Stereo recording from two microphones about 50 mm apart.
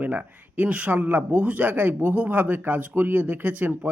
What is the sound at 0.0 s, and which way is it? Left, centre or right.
Speech, right.